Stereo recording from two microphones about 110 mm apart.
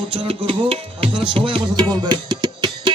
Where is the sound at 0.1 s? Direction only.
55° right (ahead or behind).